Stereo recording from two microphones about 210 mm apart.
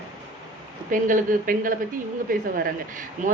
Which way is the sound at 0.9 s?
40° right (ahead or behind).